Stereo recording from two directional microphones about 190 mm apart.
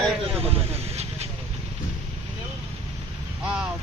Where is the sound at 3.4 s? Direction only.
5° right (ahead or behind).